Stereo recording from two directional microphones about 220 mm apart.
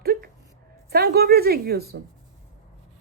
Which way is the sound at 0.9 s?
45° right (ahead or behind).